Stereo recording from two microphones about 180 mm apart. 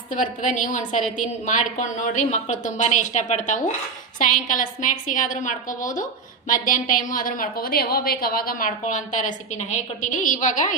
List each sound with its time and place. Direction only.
0.1 s a woman's voice: 45° left (ahead or behind)